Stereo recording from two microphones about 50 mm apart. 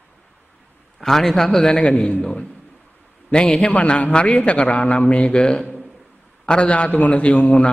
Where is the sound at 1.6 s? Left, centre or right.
Left.